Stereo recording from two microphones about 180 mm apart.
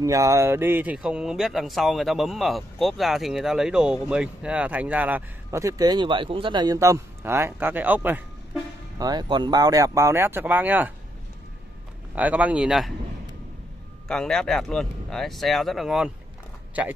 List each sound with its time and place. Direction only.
0.0 s speech: 15° right (ahead or behind)
8.9 s speech: 20° right (ahead or behind)
12.2 s speech: 10° right (ahead or behind)
14.0 s speech: 5° left (ahead or behind)